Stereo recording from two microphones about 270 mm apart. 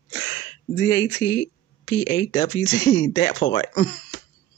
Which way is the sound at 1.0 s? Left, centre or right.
Left.